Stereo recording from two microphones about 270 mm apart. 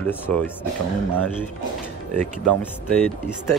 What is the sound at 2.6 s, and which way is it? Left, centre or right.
Speech, centre.